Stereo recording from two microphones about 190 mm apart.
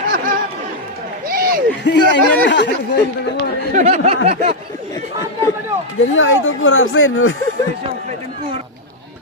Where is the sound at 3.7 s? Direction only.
35° right (ahead or behind).